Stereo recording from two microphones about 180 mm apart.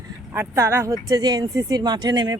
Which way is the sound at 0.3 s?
15° right (ahead or behind).